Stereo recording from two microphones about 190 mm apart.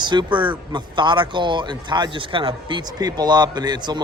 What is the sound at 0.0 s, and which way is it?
A man's voice, 25° right (ahead or behind).